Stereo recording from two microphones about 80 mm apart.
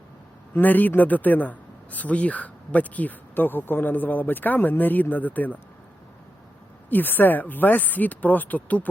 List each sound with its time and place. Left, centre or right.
0.5 s speech: left
6.9 s speech: left